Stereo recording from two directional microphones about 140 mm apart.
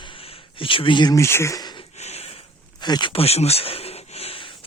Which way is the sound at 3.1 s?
45° left (ahead or behind).